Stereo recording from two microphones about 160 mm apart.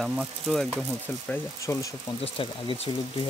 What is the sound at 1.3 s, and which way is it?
Speech, 20° left (ahead or behind).